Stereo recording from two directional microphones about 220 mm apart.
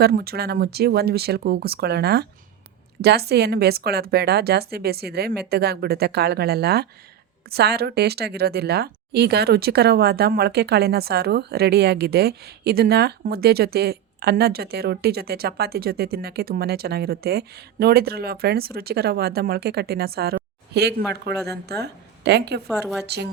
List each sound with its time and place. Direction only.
0.0 s a woman's voice: 45° right (ahead or behind)
22.6 s a woman's voice: centre (ahead or behind)
23.0 s a woman's voice: 50° right (ahead or behind)